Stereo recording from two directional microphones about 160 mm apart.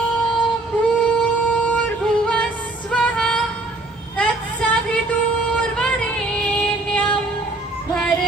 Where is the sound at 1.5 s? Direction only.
5° left (ahead or behind).